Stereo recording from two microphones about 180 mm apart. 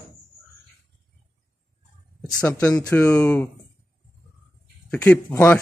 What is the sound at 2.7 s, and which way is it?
Speech, 5° left (ahead or behind).